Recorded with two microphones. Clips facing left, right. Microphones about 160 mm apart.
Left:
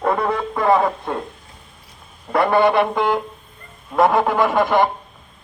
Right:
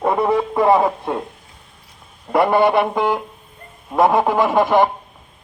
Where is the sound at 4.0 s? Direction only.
20° right (ahead or behind).